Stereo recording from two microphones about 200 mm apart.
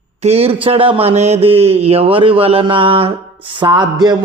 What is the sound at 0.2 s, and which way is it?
A man's voice, 30° right (ahead or behind).